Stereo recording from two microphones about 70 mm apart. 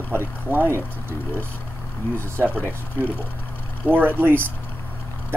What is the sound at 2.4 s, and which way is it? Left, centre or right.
Speech, left.